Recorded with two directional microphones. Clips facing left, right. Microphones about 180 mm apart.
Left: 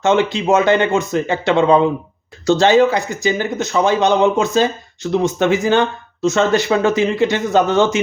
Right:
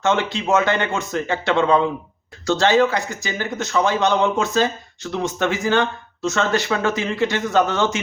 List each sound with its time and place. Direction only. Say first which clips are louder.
0.0 s speech: left 5 dB; 15° left (ahead or behind)